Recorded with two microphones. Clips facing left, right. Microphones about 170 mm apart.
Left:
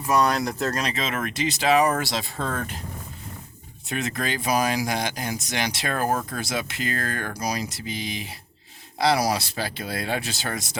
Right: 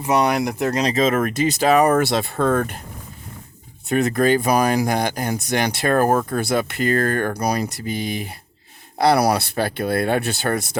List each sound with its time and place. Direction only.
0.0 s speech: 20° right (ahead or behind)
0.8 s speech: 40° right (ahead or behind); by 2.8 s 55° right (ahead or behind)
3.8 s speech: 55° right (ahead or behind)